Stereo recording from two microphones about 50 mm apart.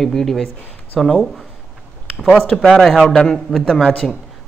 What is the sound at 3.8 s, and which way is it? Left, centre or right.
Speech, left.